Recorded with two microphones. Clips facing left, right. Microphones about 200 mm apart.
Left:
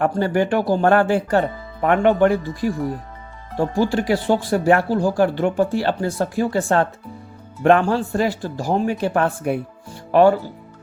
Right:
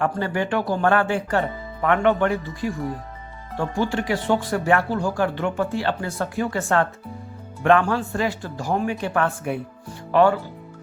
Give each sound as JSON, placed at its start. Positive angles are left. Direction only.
{"t": 0.0, "sound": "speech", "side_deg": 40}